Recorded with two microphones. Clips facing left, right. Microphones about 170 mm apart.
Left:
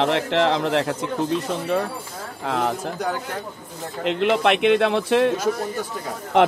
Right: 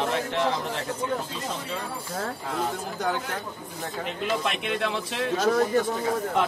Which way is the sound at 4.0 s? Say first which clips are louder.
Left 9 dB; 75° left (ahead or behind).